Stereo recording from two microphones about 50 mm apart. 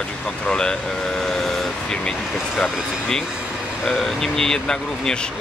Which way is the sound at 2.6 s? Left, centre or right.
Centre.